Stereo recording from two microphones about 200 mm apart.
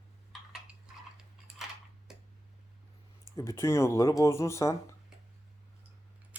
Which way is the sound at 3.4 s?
15° left (ahead or behind).